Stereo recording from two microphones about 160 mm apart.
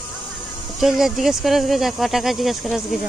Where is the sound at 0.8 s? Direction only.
Centre (ahead or behind).